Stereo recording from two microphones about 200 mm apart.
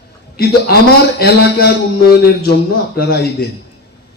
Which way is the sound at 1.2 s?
50° left (ahead or behind).